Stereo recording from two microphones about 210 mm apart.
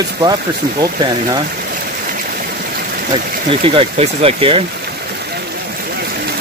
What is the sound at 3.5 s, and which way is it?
Speech, 25° right (ahead or behind).